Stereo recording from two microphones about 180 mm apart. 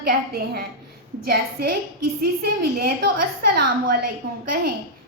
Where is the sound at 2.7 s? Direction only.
55° right (ahead or behind).